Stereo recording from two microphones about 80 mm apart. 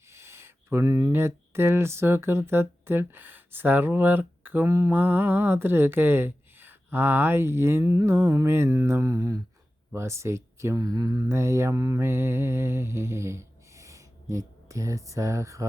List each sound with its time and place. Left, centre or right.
0.0 s a sound: right
1.1 s speech: right
10.8 s speech: right
11.3 s mantra: right